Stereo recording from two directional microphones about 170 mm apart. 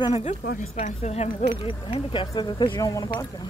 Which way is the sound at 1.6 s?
30° left (ahead or behind).